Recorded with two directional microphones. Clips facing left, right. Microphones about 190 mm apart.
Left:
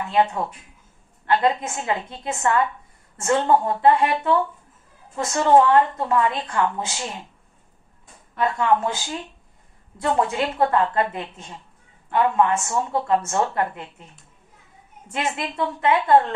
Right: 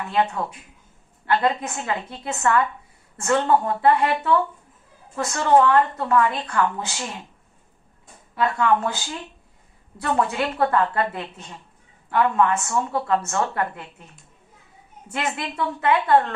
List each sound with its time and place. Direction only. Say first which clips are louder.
1.3 s a woman's voice: left 1 dB; 25° left (ahead or behind)
8.4 s a woman's voice: even; 25° left (ahead or behind)
15.1 s a woman's voice: left 1 dB; 20° left (ahead or behind)